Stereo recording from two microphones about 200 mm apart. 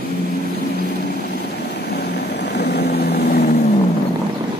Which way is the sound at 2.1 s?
55° left (ahead or behind).